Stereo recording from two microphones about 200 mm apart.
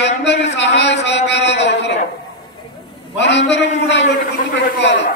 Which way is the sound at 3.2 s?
60° left (ahead or behind).